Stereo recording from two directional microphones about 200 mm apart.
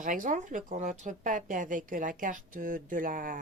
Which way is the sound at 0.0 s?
40° right (ahead or behind).